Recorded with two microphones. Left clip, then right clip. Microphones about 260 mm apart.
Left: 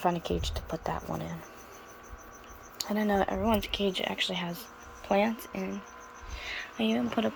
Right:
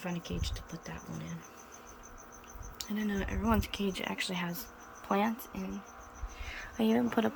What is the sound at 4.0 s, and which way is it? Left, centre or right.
Speech, centre.